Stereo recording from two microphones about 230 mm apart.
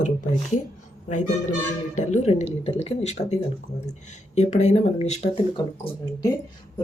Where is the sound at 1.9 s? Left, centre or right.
Left.